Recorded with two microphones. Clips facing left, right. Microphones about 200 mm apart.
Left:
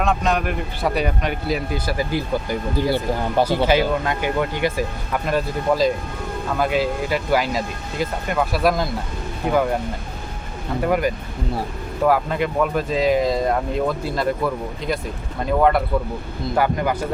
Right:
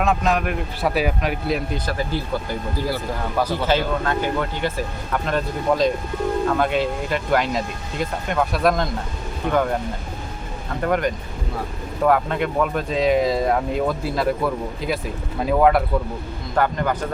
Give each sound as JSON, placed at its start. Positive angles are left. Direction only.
{"t": 0.0, "sound": "speech", "side_deg": 0}
{"t": 2.9, "sound": "speech", "side_deg": 30}
{"t": 3.7, "sound": "speech", "side_deg": 15}
{"t": 10.8, "sound": "speech", "side_deg": 5}
{"t": 16.6, "sound": "speech", "side_deg": 10}